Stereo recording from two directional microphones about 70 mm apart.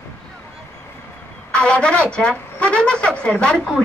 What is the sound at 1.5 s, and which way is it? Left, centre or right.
A woman's voice, centre.